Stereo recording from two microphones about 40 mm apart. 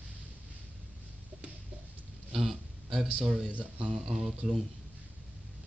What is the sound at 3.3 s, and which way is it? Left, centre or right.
Speech, centre.